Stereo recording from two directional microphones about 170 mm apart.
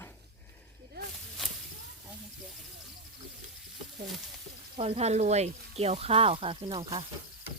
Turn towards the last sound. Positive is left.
turn(degrees=-30)  # may be behind; listen again after turning